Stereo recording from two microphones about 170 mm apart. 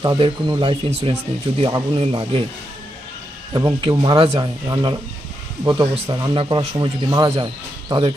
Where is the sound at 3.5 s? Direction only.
25° right (ahead or behind).